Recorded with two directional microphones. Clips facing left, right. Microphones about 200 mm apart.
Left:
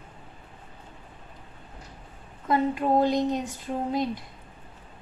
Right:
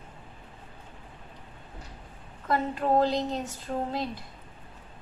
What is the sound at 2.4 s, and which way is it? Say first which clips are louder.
Speech: left 3 dB; 15° left (ahead or behind).